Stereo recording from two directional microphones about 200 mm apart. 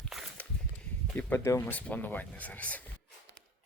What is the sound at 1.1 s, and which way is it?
Speech, 10° left (ahead or behind).